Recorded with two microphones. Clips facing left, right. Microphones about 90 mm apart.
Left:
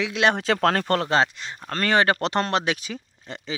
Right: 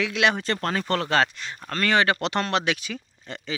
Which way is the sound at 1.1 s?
25° left (ahead or behind).